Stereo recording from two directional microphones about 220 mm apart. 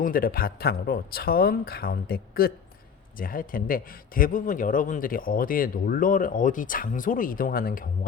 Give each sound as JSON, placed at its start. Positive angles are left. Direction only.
{"t": 0.0, "sound": "a man's voice", "side_deg": 40}